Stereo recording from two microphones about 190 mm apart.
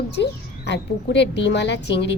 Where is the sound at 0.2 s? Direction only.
65° left (ahead or behind).